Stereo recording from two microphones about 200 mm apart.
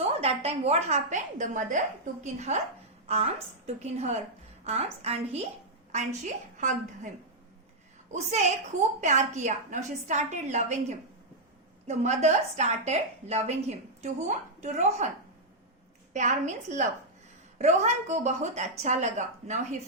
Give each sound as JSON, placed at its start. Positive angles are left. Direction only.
{"t": 0.0, "sound": "a woman's voice", "side_deg": -30}
{"t": 8.1, "sound": "a woman's voice", "side_deg": -35}
{"t": 16.1, "sound": "a woman's voice", "side_deg": -35}